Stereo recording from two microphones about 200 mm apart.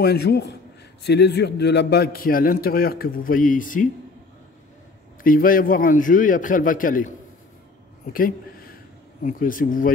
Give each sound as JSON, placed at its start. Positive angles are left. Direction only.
{"t": 0.0, "sound": "a man's voice", "side_deg": 55}
{"t": 5.2, "sound": "a man's voice", "side_deg": 45}